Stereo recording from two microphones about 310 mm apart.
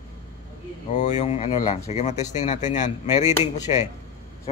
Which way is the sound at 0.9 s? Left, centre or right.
Left.